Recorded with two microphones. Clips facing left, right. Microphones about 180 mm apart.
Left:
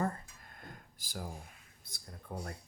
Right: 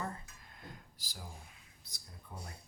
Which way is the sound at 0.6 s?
50° left (ahead or behind).